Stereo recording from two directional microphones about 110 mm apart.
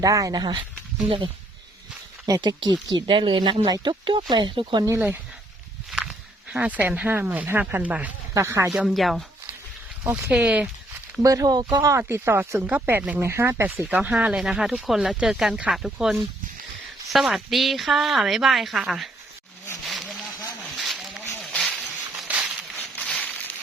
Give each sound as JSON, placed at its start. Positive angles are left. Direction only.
{"t": 0.0, "sound": "speech", "side_deg": -30}
{"t": 2.2, "sound": "speech", "side_deg": -35}
{"t": 2.9, "sound": "speech", "side_deg": -50}
{"t": 6.5, "sound": "speech", "side_deg": -10}
{"t": 8.3, "sound": "speech", "side_deg": -25}
{"t": 8.7, "sound": "speech", "side_deg": -5}
{"t": 10.2, "sound": "speech", "side_deg": -10}
{"t": 11.2, "sound": "speech", "side_deg": -30}
{"t": 19.8, "sound": "a sound", "side_deg": 0}
{"t": 22.3, "sound": "a sound", "side_deg": -10}
{"t": 22.8, "sound": "a sound", "side_deg": 10}